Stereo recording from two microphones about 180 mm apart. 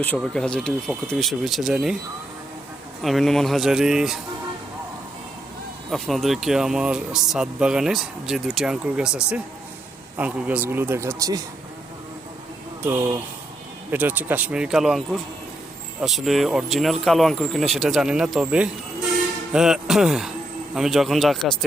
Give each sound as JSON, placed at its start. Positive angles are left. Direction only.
{"t": 0.0, "sound": "speech", "side_deg": 5}
{"t": 3.0, "sound": "speech", "side_deg": 0}
{"t": 5.9, "sound": "speech", "side_deg": 0}
{"t": 12.8, "sound": "speech", "side_deg": -15}